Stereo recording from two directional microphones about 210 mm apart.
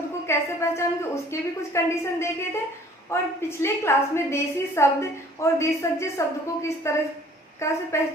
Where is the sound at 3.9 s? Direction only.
10° left (ahead or behind).